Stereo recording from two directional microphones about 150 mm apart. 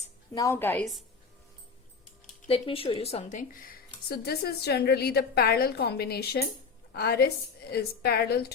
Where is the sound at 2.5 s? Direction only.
40° left (ahead or behind); by 8.5 s 90° left.